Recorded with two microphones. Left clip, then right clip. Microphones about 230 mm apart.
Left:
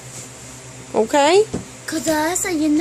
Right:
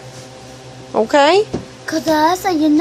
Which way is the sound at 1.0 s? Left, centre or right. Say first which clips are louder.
Right 3 dB; centre.